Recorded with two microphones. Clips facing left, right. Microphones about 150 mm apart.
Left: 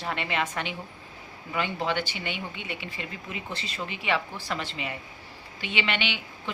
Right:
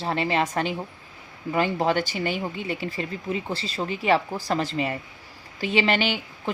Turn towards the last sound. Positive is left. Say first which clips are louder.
# right 6 dB
turn(degrees=-40)  # may be behind; listen again after turning